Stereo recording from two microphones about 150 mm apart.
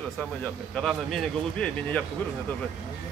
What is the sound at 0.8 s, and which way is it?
Speech, 5° left (ahead or behind).